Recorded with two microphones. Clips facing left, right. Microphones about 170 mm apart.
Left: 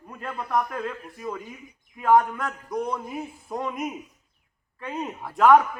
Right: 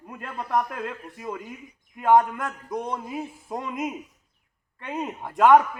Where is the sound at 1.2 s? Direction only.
20° right (ahead or behind).